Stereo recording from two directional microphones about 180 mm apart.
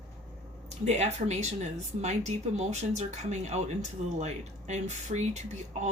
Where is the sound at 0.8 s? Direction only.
40° right (ahead or behind).